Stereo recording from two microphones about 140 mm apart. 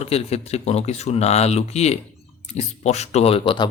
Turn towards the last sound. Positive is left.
turn(degrees=35)  # may be behind; listen again after turning